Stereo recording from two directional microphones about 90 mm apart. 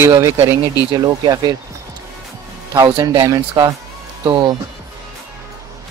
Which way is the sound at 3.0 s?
40° right (ahead or behind).